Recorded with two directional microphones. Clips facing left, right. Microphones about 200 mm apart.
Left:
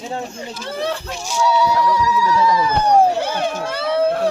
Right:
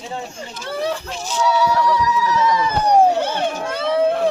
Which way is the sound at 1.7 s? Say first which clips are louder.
Even; 10° left (ahead or behind).